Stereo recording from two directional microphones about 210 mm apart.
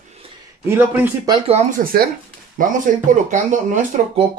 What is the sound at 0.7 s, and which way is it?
Speech, 10° right (ahead or behind).